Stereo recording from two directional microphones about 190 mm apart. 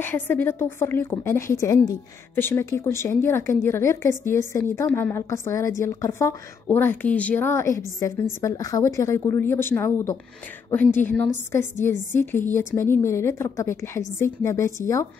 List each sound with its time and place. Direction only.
0.0 s a woman's voice: 10° left (ahead or behind)